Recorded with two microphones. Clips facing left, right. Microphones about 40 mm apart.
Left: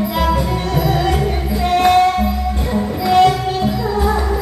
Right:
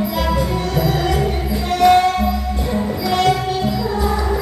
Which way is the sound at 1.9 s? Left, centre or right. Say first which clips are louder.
Right 1 dB; centre.